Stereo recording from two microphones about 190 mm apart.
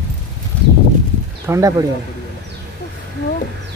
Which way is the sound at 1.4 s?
15° right (ahead or behind).